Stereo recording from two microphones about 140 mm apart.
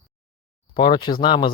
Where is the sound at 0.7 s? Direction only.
35° left (ahead or behind).